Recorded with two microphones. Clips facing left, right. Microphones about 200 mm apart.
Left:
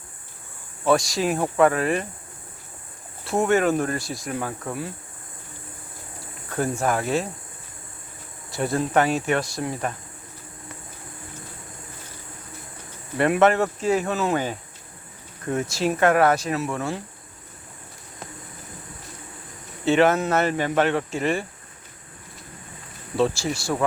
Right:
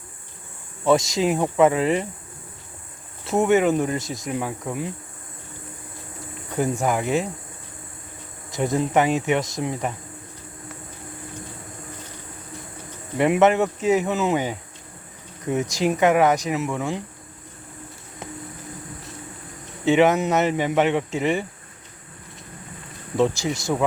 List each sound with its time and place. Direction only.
0.9 s speech: 20° right (ahead or behind)
3.2 s speech: 15° right (ahead or behind)
6.5 s speech: 15° right (ahead or behind)
8.4 s speech: 20° right (ahead or behind)
13.1 s speech: 15° right (ahead or behind)
19.8 s speech: 15° right (ahead or behind)
23.1 s speech: 20° right (ahead or behind)